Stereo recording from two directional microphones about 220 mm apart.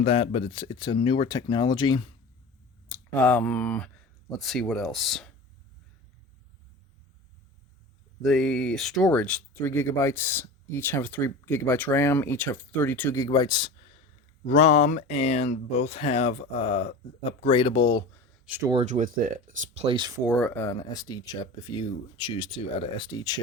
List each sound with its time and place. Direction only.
0.0 s speech: 25° left (ahead or behind)
2.9 s speech: 5° left (ahead or behind)
8.2 s speech: centre (ahead or behind); by 18.0 s 20° left (ahead or behind)
18.4 s speech: 10° right (ahead or behind)
18.7 s speech: 30° right (ahead or behind)
20.2 s speech: centre (ahead or behind)
20.5 s speech: 15° left (ahead or behind)